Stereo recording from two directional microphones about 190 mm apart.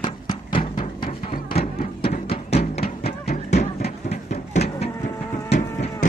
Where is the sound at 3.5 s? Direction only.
35° left (ahead or behind).